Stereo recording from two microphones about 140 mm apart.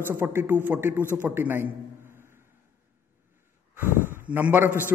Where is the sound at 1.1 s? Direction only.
15° right (ahead or behind).